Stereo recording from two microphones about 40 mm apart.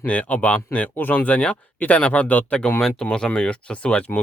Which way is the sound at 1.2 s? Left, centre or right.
Left.